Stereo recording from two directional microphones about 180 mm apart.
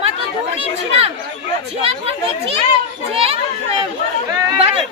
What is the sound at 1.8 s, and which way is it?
Children playing, 35° right (ahead or behind).